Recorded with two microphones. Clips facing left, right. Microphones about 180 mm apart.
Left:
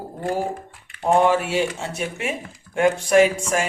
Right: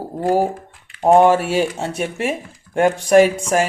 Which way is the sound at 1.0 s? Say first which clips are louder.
Right 5 dB; 40° right (ahead or behind).